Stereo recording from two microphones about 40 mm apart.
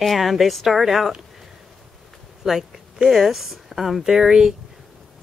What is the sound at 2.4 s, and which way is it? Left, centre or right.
Speech, centre.